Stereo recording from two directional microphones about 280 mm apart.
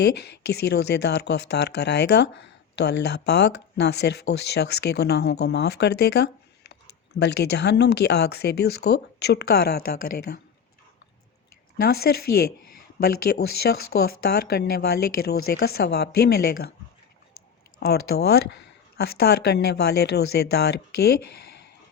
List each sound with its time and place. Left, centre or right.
0.0 s speech: left
11.8 s speech: left
17.7 s speech: left